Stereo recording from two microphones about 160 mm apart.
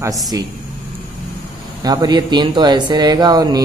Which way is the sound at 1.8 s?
25° right (ahead or behind).